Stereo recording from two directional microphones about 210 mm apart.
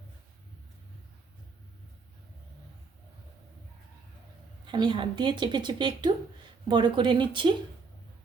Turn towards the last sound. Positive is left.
turn(degrees=-20)  # may be behind; listen again after turning